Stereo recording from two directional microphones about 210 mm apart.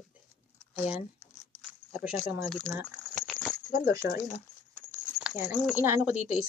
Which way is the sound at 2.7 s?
Centre (ahead or behind).